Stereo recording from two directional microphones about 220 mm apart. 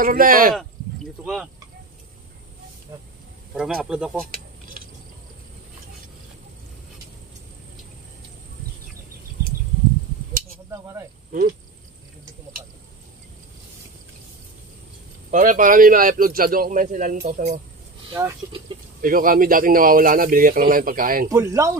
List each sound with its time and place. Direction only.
0.0 s speech: 40° right (ahead or behind)
1.2 s speech: centre (ahead or behind)
3.5 s speech: 5° right (ahead or behind)
10.7 s speech: 15° right (ahead or behind)
15.3 s speech: 35° right (ahead or behind)
18.1 s speech: 20° right (ahead or behind)
18.9 s speech: 40° right (ahead or behind)
21.3 s speech: 15° right (ahead or behind)